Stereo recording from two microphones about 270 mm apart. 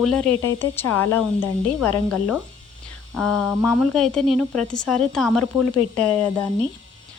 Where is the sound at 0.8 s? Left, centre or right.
Left.